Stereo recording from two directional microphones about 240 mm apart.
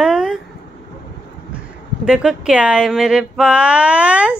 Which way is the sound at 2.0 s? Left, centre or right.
Centre.